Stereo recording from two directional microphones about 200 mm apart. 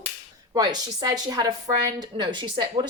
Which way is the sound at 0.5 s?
20° right (ahead or behind).